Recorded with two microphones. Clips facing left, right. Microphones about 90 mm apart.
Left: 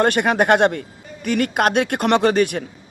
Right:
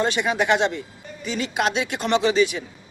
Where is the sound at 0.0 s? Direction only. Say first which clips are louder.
Left 5 dB; 60° left (ahead or behind).